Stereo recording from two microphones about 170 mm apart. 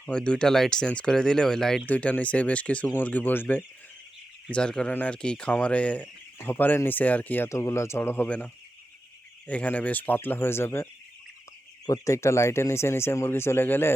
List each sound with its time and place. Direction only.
0.0 s speech: 5° left (ahead or behind)
9.5 s speech: 10° left (ahead or behind)
11.9 s speech: 15° left (ahead or behind)